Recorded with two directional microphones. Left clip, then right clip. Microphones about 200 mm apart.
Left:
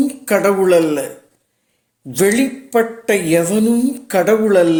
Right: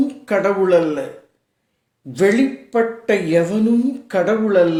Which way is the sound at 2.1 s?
45° left (ahead or behind).